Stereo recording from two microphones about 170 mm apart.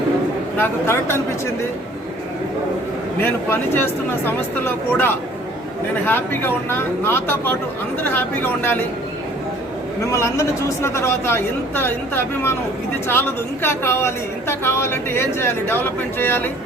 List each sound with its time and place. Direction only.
0.5 s speech: 15° left (ahead or behind)
3.2 s speech: 15° left (ahead or behind)
10.1 s speech: 15° left (ahead or behind)